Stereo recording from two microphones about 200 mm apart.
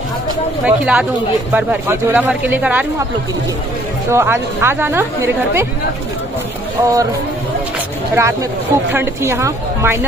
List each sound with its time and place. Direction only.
0.7 s speech: 5° right (ahead or behind)
4.1 s speech: 15° right (ahead or behind)
6.8 s speech: 15° right (ahead or behind)
8.2 s speech: 15° right (ahead or behind)